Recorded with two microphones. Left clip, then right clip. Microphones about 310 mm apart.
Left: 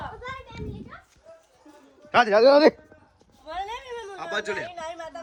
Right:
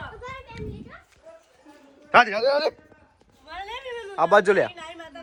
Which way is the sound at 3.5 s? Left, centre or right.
Left.